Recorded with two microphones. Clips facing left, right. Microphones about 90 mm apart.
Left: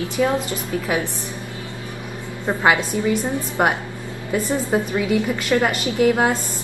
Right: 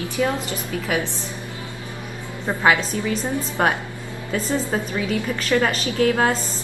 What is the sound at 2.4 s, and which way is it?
A woman's voice, 20° left (ahead or behind).